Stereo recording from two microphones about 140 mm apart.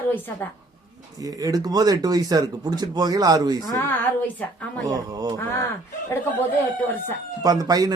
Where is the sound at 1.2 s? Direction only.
25° right (ahead or behind).